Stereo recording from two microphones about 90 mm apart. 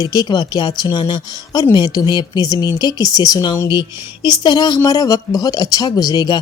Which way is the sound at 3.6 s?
60° left (ahead or behind).